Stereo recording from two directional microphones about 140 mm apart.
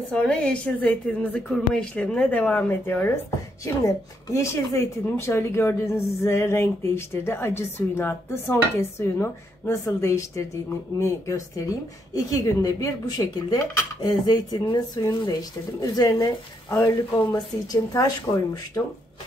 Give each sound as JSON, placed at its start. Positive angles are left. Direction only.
{"t": 0.1, "sound": "a woman's voice", "side_deg": 5}